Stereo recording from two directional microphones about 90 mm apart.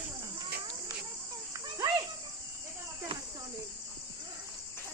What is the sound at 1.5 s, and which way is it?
Children playing, 40° right (ahead or behind).